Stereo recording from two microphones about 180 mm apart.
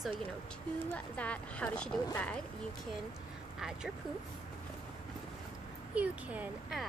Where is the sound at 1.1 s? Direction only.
5° left (ahead or behind).